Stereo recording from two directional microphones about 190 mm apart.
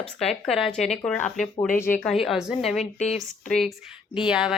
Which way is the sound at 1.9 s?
5° left (ahead or behind).